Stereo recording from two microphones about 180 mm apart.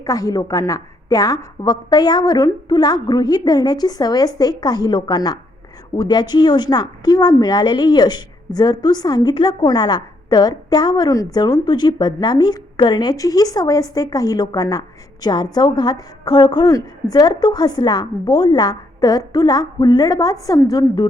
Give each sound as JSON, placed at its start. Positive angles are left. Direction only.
{"t": 0.0, "sound": "a woman's voice", "side_deg": 20}